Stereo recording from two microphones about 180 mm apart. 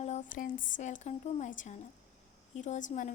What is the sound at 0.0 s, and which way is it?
A woman's voice, 45° left (ahead or behind).